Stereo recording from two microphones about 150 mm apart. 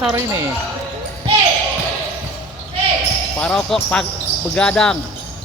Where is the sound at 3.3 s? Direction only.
5° left (ahead or behind).